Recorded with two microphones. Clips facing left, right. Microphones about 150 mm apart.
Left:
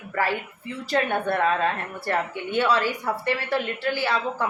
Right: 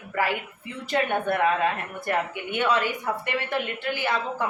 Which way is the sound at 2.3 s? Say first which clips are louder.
Left 2 dB; 30° left (ahead or behind).